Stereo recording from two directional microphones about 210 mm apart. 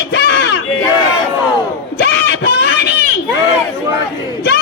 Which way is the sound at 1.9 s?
55° left (ahead or behind).